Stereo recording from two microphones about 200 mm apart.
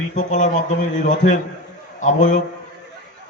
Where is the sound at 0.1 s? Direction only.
35° left (ahead or behind).